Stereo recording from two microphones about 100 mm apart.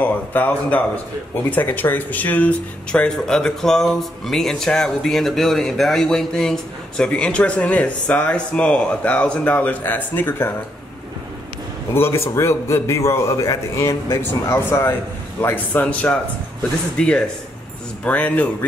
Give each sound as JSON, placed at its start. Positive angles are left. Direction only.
{"t": 0.0, "sound": "speech", "side_deg": 15}
{"t": 11.9, "sound": "a man's voice", "side_deg": 25}